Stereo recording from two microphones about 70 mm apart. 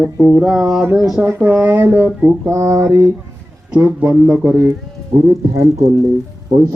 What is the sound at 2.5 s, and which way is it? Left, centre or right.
Speech, right.